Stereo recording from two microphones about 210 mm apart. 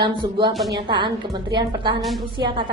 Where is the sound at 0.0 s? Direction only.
20° right (ahead or behind).